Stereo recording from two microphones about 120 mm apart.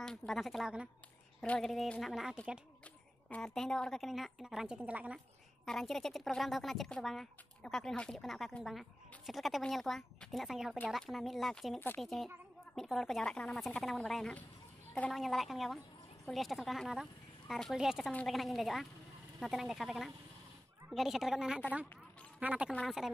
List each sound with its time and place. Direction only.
0.0 s speech: 5° left (ahead or behind)
1.4 s speech: 5° left (ahead or behind); by 5.2 s 10° right (ahead or behind)
5.7 s speech: centre (ahead or behind)